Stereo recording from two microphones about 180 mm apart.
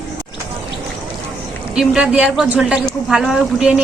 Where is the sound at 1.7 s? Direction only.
5° right (ahead or behind).